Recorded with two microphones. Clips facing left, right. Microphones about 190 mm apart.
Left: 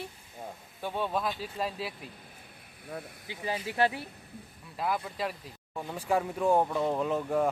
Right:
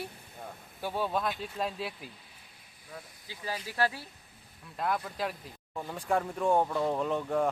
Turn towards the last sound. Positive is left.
turn(degrees=5)  # may be behind; listen again after turning